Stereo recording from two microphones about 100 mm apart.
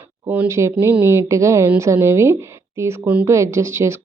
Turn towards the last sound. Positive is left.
turn(degrees=-25)  # may be behind; listen again after turning